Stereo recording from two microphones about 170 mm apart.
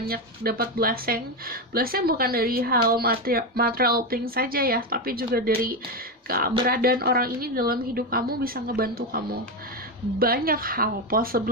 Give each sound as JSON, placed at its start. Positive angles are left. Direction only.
{"t": 0.0, "sound": "speech", "side_deg": -60}